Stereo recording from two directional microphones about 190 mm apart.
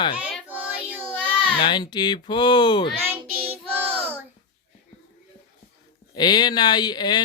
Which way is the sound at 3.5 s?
10° right (ahead or behind).